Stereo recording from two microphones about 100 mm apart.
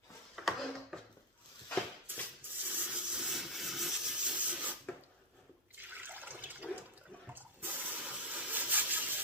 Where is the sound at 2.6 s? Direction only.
15° right (ahead or behind).